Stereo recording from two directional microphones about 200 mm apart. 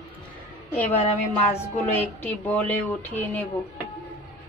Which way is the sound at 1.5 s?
30° left (ahead or behind).